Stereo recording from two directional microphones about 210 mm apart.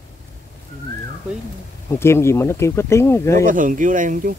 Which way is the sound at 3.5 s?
40° right (ahead or behind).